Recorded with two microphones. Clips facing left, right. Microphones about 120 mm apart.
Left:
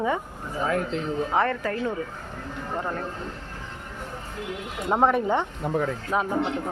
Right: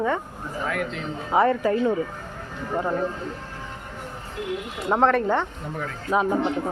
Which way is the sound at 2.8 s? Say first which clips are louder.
Right 6 dB; 10° right (ahead or behind).